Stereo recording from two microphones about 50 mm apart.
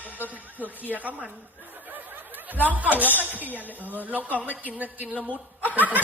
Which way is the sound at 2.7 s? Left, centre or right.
Right.